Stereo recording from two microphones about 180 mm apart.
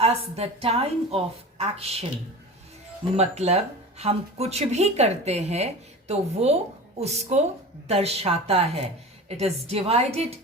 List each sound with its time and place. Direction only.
0.0 s speech: 35° right (ahead or behind)
3.2 s speech: 35° right (ahead or behind)